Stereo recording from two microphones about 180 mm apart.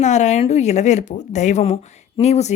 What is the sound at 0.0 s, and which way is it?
Speech, 40° left (ahead or behind).